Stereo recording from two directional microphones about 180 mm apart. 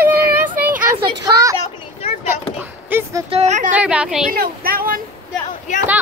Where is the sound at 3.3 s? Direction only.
40° right (ahead or behind).